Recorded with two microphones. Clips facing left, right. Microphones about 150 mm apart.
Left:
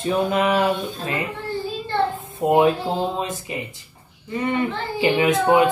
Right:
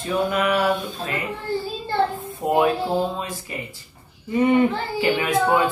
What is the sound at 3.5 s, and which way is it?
Speech, 20° left (ahead or behind).